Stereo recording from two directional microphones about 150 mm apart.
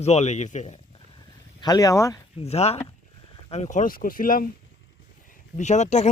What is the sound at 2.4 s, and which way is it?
Speech, 45° left (ahead or behind).